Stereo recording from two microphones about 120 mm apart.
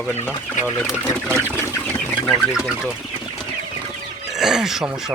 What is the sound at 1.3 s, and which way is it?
Bird, 20° right (ahead or behind).